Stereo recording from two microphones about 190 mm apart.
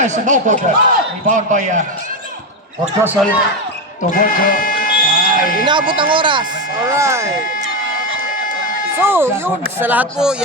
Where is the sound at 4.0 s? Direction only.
45° left (ahead or behind).